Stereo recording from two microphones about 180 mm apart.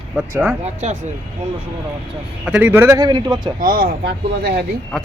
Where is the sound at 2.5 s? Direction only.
10° right (ahead or behind).